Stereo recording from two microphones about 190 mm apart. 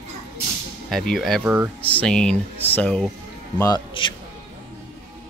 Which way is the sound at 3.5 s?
20° left (ahead or behind).